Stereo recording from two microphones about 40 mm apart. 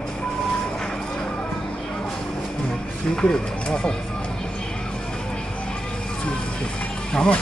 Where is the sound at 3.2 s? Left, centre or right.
Left.